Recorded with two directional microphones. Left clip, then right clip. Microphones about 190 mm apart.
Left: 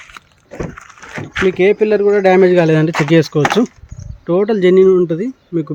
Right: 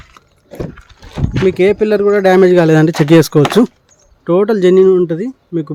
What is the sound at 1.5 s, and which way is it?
Speech, 20° right (ahead or behind).